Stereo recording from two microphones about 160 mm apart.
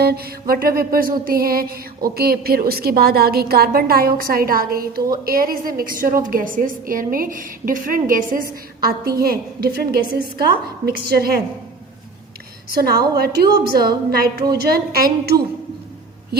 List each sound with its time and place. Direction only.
0.0 s music: 80° right
5.2 s a woman's voice: 65° right (ahead or behind)
10.8 s music: 75° right (ahead or behind)
12.7 s music: 75° right (ahead or behind)